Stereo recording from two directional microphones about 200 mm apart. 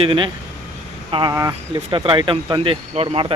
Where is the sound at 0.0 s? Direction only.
25° right (ahead or behind).